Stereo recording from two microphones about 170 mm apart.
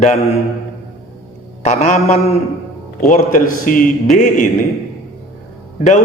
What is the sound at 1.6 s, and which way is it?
A man's voice, 45° left (ahead or behind).